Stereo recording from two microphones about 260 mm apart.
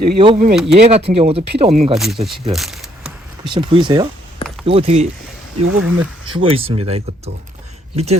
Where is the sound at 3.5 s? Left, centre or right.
Centre.